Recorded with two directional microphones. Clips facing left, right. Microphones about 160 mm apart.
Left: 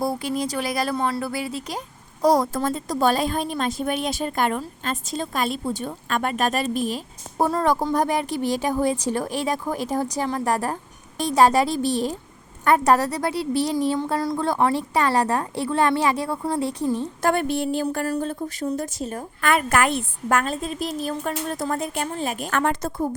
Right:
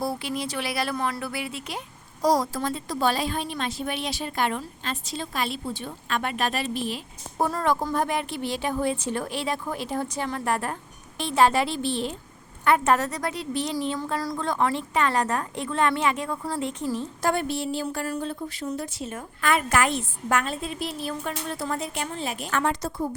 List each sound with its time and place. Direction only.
0.0 s speech: 45° left (ahead or behind)
0.9 s a woman's voice: 30° left (ahead or behind)
2.2 s a woman's voice: 55° left (ahead or behind)
2.6 s a woman's voice: 45° left (ahead or behind); by 14.3 s 25° left (ahead or behind)
14.3 s a woman's voice: 35° left (ahead or behind)
17.2 s a woman's voice: 55° left (ahead or behind)
19.4 s a woman's voice: 55° left (ahead or behind)